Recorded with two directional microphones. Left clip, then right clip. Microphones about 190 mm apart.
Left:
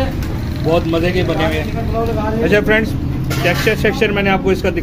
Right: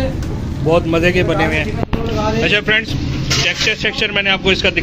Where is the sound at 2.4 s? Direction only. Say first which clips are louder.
Left 2 dB; 5° left (ahead or behind).